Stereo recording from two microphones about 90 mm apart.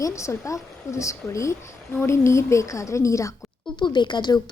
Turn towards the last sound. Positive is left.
turn(degrees=55)  # may be behind; listen again after turning